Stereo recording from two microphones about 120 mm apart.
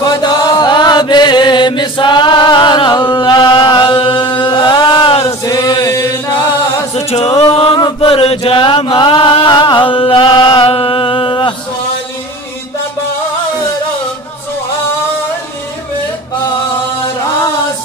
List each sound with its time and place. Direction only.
0.2 s chant: 35° left (ahead or behind)
5.4 s chant: 30° left (ahead or behind)
6.9 s a capella: 60° left (ahead or behind)
7.7 s chant: 35° left (ahead or behind)
8.1 s chant: 55° left (ahead or behind)